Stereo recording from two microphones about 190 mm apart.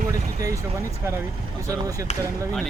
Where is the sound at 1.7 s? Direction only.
15° right (ahead or behind).